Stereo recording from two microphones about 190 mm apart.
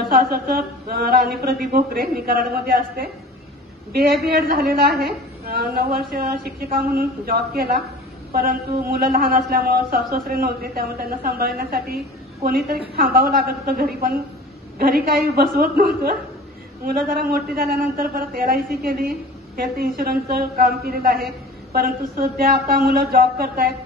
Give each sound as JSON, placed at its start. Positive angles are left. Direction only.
{"t": 0.2, "sound": "a man's voice", "side_deg": -55}